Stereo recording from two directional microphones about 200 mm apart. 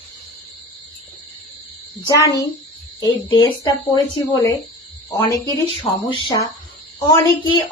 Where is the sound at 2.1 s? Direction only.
15° left (ahead or behind).